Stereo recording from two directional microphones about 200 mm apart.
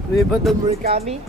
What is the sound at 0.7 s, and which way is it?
Speech, 30° right (ahead or behind).